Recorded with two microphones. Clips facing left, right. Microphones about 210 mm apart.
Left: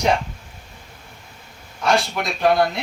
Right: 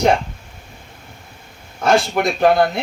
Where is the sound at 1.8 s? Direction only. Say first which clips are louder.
Right 5 dB; 50° right (ahead or behind).